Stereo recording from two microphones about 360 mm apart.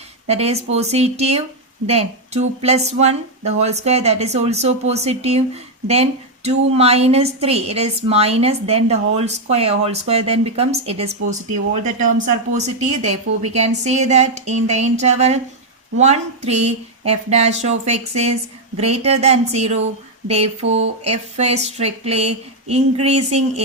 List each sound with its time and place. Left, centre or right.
0.3 s a woman's voice: centre